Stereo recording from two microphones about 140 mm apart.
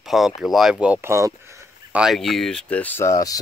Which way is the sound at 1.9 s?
5° right (ahead or behind).